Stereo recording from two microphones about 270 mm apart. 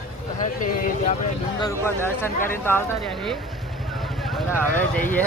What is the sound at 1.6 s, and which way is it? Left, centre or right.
Speech, centre.